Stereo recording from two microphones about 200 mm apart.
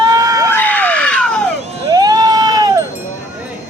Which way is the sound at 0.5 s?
10° left (ahead or behind).